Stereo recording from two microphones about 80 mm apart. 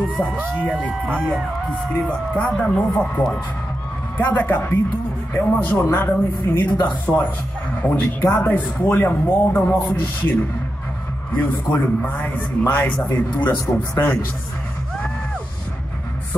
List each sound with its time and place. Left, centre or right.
1.0 s speech: centre
2.0 s speech: centre
4.2 s speech: left
11.3 s speech: left